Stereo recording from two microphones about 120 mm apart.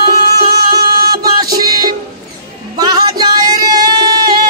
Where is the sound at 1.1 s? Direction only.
35° right (ahead or behind).